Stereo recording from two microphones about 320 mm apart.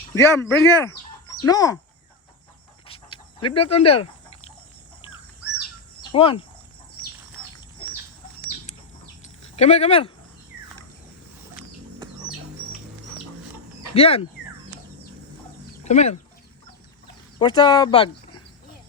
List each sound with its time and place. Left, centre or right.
0.1 s speech: centre
2.8 s cricket: centre
3.7 s speech: centre
6.0 s cricket: centre
9.2 s a sound: left
13.9 s speech: centre
15.8 s speech: left
17.4 s speech: centre